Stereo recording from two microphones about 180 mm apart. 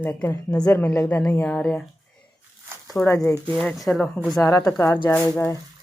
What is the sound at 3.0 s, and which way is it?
Speech, 15° left (ahead or behind).